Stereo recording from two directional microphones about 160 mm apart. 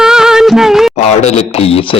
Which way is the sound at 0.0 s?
5° right (ahead or behind).